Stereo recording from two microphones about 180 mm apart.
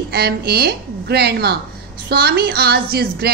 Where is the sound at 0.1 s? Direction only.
60° right (ahead or behind).